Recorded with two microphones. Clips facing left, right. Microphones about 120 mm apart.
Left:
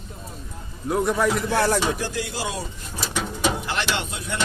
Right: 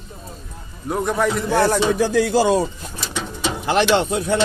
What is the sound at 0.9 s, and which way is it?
Speech, 20° right (ahead or behind).